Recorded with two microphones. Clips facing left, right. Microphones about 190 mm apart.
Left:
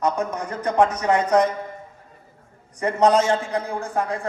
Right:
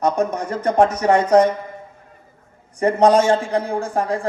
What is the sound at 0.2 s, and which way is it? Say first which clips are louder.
A man's voice: right 5 dB; 25° right (ahead or behind).